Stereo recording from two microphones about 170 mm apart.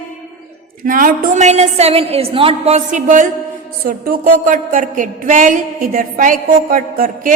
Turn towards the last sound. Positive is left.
turn(degrees=-50)  # may be behind; listen again after turning